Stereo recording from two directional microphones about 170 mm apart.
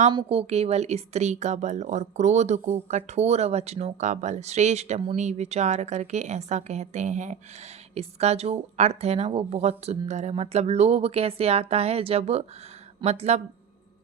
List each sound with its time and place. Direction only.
0.1 s speech: 30° right (ahead or behind)